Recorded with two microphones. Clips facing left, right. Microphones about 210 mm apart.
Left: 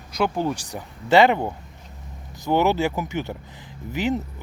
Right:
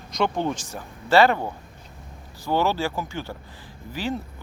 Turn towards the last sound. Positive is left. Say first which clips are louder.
# left 5 dB
turn(degrees=20)  # may be behind; listen again after turning